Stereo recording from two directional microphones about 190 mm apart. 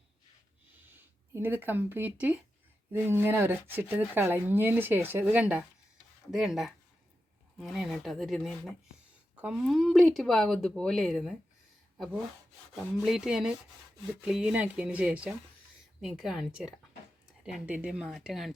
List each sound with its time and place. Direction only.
0.9 s speech: 10° right (ahead or behind)